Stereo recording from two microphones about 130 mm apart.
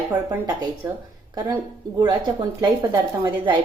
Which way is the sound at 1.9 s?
35° right (ahead or behind).